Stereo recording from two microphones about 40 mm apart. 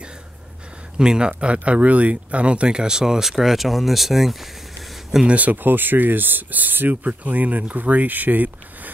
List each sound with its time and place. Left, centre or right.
0.9 s speech: centre
1.4 s speech: right
2.8 s speech: centre
5.2 s speech: right